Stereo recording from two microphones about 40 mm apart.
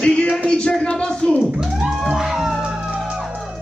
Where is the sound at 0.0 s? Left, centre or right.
Left.